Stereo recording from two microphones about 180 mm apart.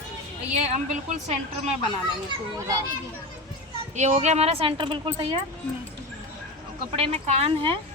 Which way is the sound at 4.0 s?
40° right (ahead or behind).